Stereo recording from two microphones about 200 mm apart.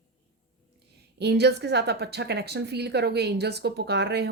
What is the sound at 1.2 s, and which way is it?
A woman's voice, 55° right (ahead or behind).